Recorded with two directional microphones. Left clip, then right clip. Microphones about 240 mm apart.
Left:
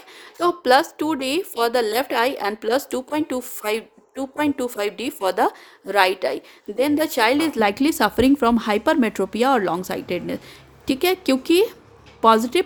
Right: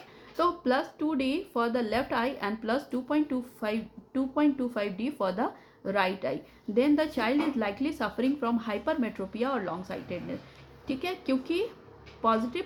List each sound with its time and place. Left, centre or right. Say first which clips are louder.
0.4 s a woman's voice: left 11 dB; left